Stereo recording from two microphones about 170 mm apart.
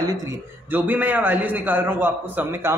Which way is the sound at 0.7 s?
10° right (ahead or behind).